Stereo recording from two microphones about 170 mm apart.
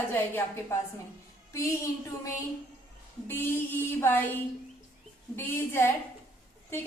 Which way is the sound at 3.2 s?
10° left (ahead or behind).